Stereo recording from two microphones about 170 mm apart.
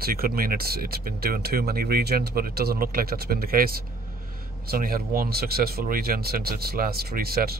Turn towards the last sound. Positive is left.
turn(degrees=-65)  # may be behind; listen again after turning